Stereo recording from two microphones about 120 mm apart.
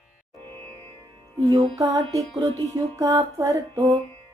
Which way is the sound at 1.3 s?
30° right (ahead or behind).